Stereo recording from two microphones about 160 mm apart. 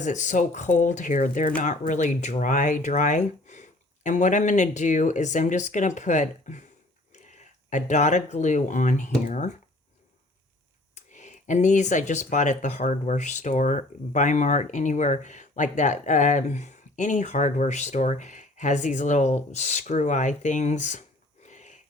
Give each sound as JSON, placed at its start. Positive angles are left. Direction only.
{"t": 0.0, "sound": "speech", "side_deg": 50}
{"t": 10.9, "sound": "speech", "side_deg": 50}
{"t": 21.4, "sound": "a sound", "side_deg": 50}